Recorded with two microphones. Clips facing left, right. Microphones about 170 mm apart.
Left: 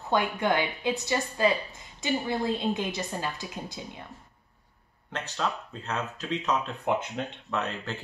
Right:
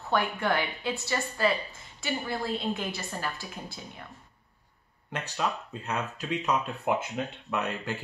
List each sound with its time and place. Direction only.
0.1 s a woman's voice: 20° left (ahead or behind)
5.1 s speech: 10° right (ahead or behind)